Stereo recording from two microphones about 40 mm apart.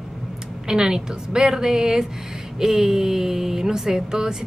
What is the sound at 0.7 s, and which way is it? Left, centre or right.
Speech, centre.